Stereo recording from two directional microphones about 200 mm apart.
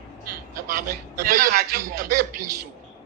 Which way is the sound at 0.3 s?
45° right (ahead or behind).